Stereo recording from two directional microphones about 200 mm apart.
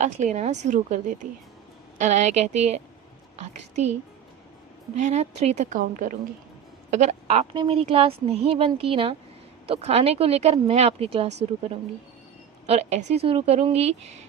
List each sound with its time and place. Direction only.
0.0 s a woman's voice: 35° right (ahead or behind)
4.9 s a woman's voice: 35° right (ahead or behind)
12.6 s a woman's voice: 30° right (ahead or behind)